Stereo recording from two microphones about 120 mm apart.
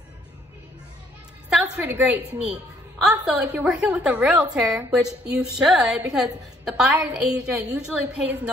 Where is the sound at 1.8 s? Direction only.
20° right (ahead or behind).